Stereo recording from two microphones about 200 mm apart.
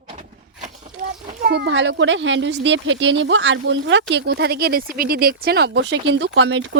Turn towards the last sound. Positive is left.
turn(degrees=-65)  # may be behind; listen again after turning